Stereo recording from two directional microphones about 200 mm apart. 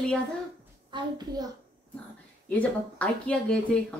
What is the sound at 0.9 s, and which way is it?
Speech, 20° right (ahead or behind).